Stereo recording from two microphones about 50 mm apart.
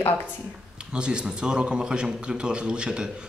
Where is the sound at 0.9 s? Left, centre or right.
Centre.